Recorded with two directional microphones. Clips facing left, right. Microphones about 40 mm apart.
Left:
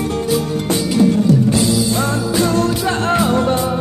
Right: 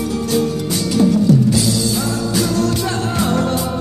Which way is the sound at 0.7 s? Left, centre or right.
Left.